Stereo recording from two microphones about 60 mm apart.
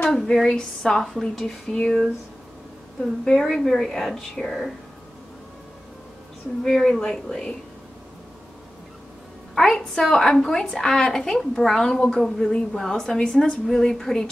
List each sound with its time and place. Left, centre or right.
0.0 s a woman's voice: centre
3.3 s a woman's voice: centre
6.6 s a woman's voice: centre
9.6 s a woman's voice: centre